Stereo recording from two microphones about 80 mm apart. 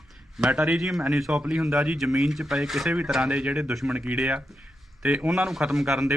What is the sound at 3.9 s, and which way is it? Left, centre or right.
A man's voice, centre.